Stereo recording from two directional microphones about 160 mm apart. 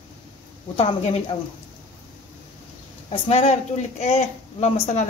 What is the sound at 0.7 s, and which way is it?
Speech, 40° left (ahead or behind).